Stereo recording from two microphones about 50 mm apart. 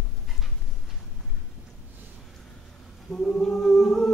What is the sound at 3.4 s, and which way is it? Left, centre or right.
Music, centre.